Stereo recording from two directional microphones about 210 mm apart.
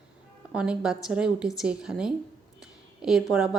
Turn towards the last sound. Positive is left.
turn(degrees=0)  # may be behind; listen again after turning